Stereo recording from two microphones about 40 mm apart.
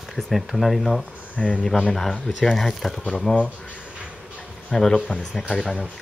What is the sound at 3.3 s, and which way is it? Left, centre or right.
Speech, centre.